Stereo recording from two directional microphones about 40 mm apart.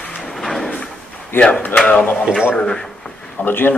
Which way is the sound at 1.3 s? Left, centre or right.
Left.